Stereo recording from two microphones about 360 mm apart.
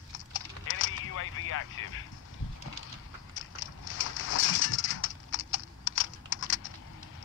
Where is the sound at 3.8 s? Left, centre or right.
Left.